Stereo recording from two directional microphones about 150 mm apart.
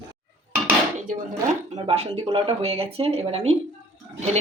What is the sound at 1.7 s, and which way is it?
A woman's voice, 45° right (ahead or behind).